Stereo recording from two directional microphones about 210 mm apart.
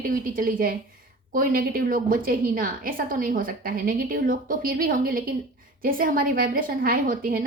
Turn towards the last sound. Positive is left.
turn(degrees=-45)  # may be behind; listen again after turning